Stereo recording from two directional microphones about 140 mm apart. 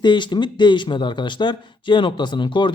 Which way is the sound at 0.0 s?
35° left (ahead or behind).